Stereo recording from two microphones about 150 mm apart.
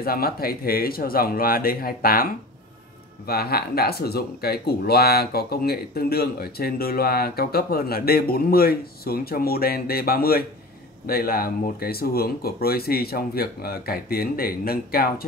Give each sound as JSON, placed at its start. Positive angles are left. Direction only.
{"t": 0.0, "sound": "speech", "side_deg": 85}
{"t": 3.3, "sound": "speech", "side_deg": 90}